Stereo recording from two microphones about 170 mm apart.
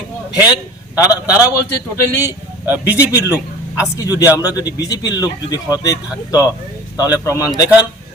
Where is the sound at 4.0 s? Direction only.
20° left (ahead or behind).